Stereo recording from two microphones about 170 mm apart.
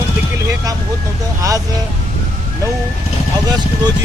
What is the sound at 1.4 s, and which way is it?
Vehicle, 20° right (ahead or behind).